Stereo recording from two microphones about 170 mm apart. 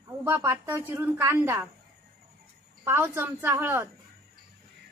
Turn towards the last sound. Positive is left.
turn(degrees=-15)  # may be behind; listen again after turning